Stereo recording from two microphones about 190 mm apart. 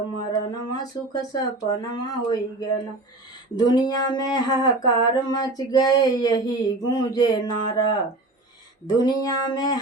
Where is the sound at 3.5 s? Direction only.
20° left (ahead or behind).